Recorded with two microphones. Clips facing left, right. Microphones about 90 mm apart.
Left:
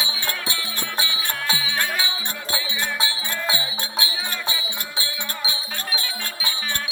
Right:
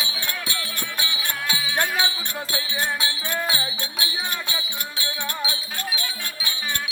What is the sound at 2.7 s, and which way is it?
Music, 35° right (ahead or behind).